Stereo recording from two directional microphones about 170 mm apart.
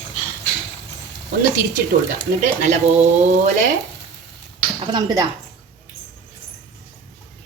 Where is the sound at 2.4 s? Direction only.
45° right (ahead or behind).